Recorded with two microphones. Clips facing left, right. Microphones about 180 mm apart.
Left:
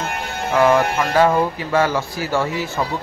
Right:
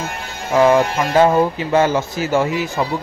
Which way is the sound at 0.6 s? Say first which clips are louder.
Right 2 dB; 20° right (ahead or behind).